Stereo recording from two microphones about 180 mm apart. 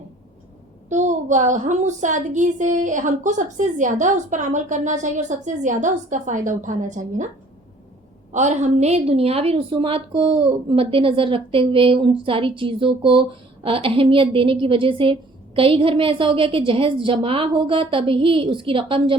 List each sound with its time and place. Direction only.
0.9 s a woman's voice: 40° right (ahead or behind)
8.3 s a woman's voice: 40° right (ahead or behind)